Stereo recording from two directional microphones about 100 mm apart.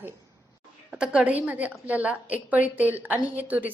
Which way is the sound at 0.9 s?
10° right (ahead or behind).